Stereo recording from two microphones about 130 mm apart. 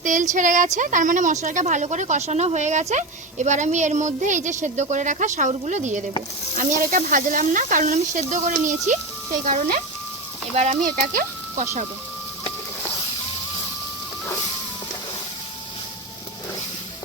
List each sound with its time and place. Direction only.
0.0 s speech: 70° right (ahead or behind)
6.6 s speech: 90° right
10.5 s speech: 60° right (ahead or behind)